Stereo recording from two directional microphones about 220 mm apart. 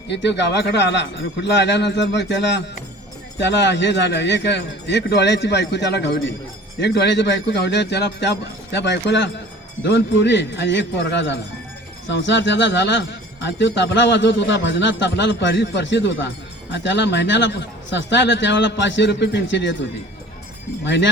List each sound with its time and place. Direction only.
0.1 s speech: 50° left (ahead or behind)